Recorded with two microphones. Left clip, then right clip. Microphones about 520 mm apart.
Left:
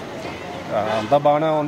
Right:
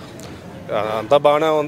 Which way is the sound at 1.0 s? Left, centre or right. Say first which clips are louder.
Right 3 dB; right.